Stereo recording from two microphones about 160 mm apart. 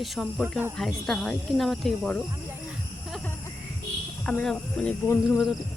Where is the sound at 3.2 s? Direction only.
15° left (ahead or behind).